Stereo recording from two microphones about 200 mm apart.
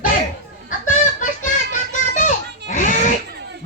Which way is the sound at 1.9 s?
40° left (ahead or behind).